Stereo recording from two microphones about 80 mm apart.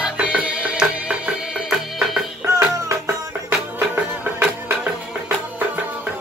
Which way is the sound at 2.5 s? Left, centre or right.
Right.